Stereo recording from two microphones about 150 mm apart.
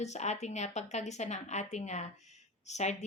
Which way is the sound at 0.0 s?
50° left (ahead or behind).